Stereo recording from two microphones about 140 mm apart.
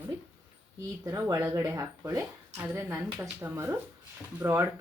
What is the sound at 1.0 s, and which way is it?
Speech, 25° right (ahead or behind).